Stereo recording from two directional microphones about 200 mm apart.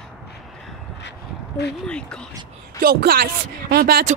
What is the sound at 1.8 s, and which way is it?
Speech, 5° left (ahead or behind).